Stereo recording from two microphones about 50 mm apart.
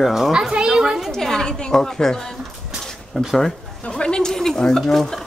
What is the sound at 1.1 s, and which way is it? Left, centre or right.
A woman's voice, centre.